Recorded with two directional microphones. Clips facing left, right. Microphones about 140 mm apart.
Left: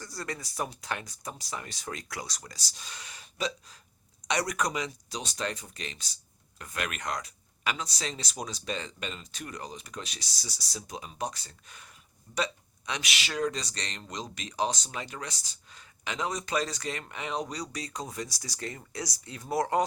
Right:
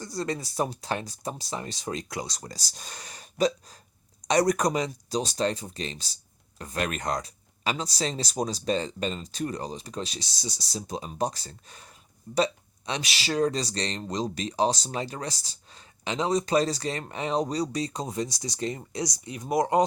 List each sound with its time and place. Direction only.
0.0 s speech: 25° right (ahead or behind)
2.5 s speech: 40° right (ahead or behind); by 19.8 s 20° right (ahead or behind)